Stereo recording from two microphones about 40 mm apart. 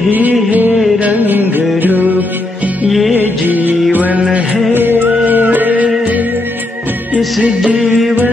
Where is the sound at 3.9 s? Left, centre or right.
Right.